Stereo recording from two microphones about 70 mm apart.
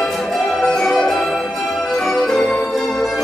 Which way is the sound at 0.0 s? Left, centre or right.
Centre.